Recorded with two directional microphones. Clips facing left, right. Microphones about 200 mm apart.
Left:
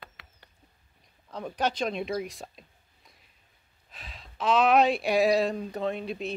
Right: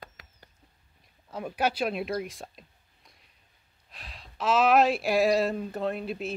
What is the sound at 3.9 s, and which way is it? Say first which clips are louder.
Speech: even; centre (ahead or behind).